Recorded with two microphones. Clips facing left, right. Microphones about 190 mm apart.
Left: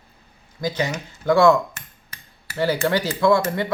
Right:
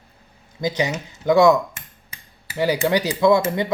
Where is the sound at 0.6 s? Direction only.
20° right (ahead or behind).